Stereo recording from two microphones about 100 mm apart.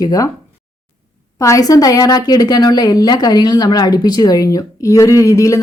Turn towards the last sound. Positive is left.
turn(degrees=35)  # may be behind; listen again after turning